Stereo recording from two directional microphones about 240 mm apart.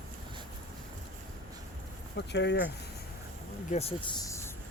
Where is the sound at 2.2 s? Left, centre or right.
Left.